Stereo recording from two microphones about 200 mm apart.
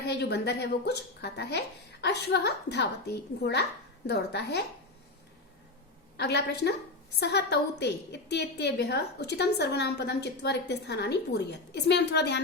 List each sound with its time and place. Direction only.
0.0 s a woman's voice: 55° left (ahead or behind)
6.1 s a woman's voice: 55° left (ahead or behind)